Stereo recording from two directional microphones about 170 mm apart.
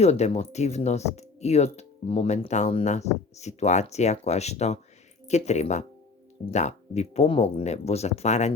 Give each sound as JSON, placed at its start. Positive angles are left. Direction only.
{"t": 0.0, "sound": "speech", "side_deg": 40}